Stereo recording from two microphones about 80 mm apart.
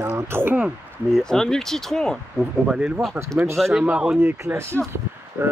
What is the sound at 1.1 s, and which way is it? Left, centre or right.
Speech, centre.